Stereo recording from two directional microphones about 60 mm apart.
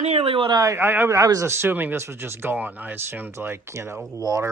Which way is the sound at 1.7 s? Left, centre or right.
Right.